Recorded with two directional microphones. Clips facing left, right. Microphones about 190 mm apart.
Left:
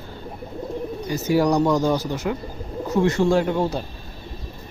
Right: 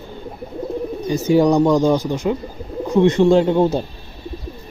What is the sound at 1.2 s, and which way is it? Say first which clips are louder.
Speech: right 5 dB; 20° right (ahead or behind).